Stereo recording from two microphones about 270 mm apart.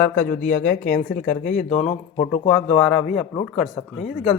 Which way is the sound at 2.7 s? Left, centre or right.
Centre.